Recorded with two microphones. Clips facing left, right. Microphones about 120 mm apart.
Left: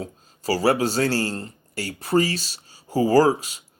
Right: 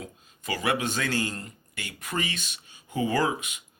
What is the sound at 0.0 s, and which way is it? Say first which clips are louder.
Speech: left 9 dB; 35° left (ahead or behind).